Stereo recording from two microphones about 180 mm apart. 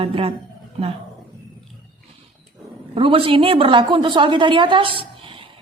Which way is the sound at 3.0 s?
30° right (ahead or behind).